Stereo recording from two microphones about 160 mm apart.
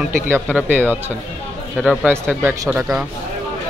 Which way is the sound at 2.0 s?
5° right (ahead or behind).